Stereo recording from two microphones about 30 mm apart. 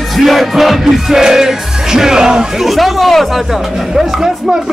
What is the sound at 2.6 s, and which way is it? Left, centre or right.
Speech, centre.